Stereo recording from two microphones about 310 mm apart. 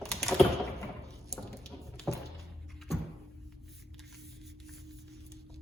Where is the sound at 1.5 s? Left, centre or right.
Centre.